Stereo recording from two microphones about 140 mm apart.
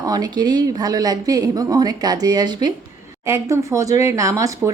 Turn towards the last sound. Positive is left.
turn(degrees=-25)  # may be behind; listen again after turning